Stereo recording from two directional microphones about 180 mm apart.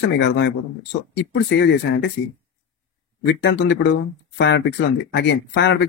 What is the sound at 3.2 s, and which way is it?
Speech, 80° left.